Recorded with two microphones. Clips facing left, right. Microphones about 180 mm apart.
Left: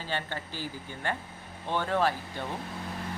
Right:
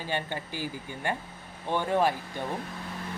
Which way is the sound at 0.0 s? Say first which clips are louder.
Right 2 dB; 15° right (ahead or behind).